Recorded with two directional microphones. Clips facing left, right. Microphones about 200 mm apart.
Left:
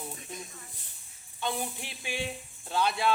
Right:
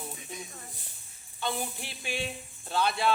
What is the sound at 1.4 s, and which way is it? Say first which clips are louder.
Sizzle: even; 15° left (ahead or behind).